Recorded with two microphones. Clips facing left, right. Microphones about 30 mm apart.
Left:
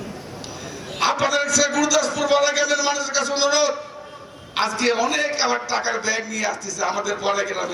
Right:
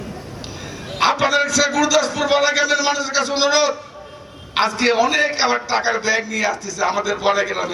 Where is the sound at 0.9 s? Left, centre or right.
Right.